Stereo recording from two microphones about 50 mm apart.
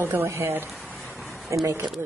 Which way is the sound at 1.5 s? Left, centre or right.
Right.